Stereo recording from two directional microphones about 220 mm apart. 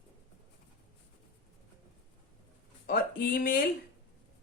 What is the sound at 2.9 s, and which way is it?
Speech, 40° left (ahead or behind).